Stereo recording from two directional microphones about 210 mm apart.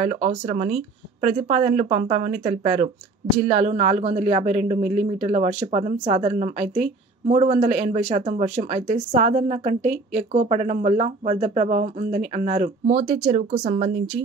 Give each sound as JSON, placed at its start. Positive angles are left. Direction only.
{"t": 0.0, "sound": "speech", "side_deg": -35}